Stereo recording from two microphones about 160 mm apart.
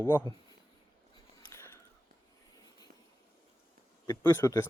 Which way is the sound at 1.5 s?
15° left (ahead or behind).